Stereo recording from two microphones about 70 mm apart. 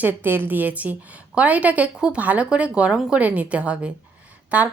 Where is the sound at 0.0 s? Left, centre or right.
Right.